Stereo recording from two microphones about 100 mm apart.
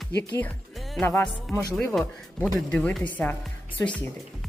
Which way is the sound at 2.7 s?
15° left (ahead or behind).